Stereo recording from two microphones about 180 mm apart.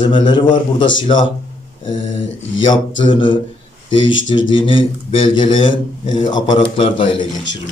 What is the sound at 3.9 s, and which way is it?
Speech, 90° left.